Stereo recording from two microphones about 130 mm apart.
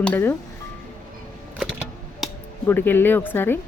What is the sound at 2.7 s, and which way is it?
Speech, 15° left (ahead or behind).